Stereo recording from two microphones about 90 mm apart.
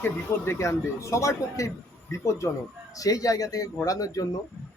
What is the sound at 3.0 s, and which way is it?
Speech, 40° left (ahead or behind).